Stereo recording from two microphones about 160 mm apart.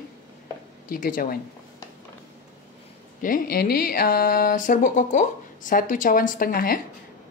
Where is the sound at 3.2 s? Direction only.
65° left (ahead or behind).